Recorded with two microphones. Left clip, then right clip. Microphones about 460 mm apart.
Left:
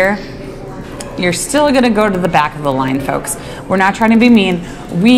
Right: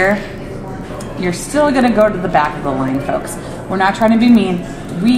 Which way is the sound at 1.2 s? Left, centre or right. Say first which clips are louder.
Left 2 dB; centre.